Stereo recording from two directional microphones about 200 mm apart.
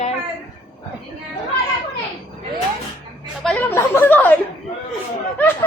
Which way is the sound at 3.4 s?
5° left (ahead or behind).